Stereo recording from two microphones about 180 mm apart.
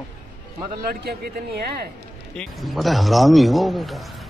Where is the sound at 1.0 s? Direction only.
60° right (ahead or behind).